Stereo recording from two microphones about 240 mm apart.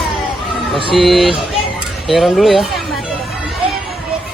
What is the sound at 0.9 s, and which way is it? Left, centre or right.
Speech, centre.